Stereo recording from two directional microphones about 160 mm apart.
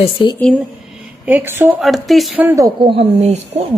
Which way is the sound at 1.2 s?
10° right (ahead or behind).